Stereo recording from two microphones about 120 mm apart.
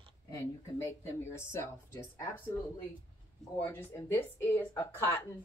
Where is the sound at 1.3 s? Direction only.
20° left (ahead or behind).